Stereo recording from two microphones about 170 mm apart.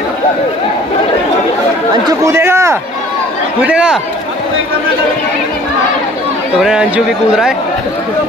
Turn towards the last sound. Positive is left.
turn(degrees=-5)  # may be behind; listen again after turning